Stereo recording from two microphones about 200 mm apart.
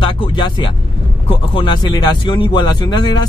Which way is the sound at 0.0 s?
25° left (ahead or behind).